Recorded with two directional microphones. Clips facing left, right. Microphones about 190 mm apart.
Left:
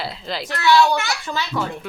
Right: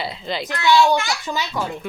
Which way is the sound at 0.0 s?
Centre (ahead or behind).